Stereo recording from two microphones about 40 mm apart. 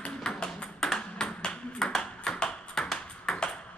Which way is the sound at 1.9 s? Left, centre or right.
Centre.